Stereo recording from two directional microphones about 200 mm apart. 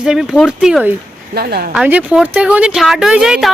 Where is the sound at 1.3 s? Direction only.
50° right (ahead or behind).